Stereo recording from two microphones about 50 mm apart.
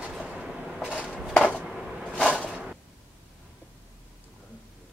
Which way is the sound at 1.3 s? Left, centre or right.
Left.